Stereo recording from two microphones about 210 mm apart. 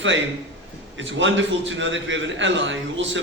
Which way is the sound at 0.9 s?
60° right (ahead or behind).